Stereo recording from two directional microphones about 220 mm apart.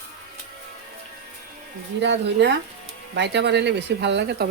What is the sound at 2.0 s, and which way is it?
Speech, 55° right (ahead or behind).